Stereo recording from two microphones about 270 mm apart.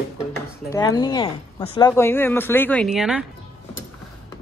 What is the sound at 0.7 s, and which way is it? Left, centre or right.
A woman's voice, centre.